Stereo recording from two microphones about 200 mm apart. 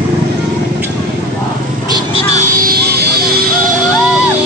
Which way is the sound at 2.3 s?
50° right (ahead or behind).